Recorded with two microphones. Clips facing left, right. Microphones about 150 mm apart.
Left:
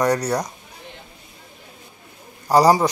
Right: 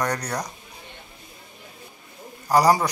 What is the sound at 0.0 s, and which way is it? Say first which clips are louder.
Speech: left 7 dB; 25° left (ahead or behind).